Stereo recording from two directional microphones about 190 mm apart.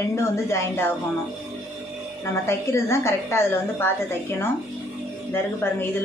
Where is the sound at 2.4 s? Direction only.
15° left (ahead or behind).